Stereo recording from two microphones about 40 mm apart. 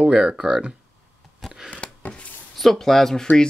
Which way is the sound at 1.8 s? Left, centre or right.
Left.